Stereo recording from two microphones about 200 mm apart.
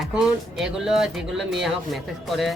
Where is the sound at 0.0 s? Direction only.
Centre (ahead or behind).